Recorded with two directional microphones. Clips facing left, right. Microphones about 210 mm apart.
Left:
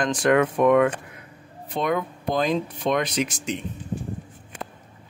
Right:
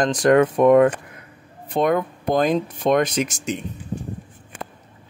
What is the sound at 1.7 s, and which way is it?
Speech, 50° right (ahead or behind).